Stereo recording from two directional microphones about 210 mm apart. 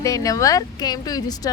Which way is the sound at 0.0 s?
15° left (ahead or behind).